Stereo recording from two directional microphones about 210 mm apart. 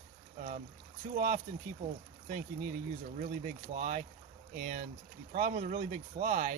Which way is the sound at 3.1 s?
35° right (ahead or behind).